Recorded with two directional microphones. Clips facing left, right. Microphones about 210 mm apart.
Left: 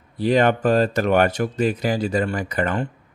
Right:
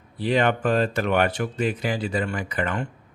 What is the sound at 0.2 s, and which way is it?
Speech, 40° left (ahead or behind).